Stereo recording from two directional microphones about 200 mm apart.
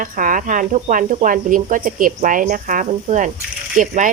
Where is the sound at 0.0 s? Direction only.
45° right (ahead or behind).